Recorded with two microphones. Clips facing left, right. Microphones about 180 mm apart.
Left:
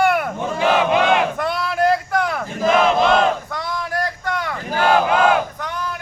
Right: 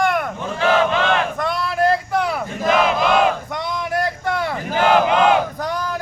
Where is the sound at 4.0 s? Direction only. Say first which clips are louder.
Right 3 dB; 25° right (ahead or behind).